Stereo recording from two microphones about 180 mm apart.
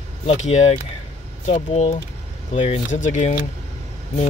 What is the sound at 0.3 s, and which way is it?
Speech, 35° left (ahead or behind).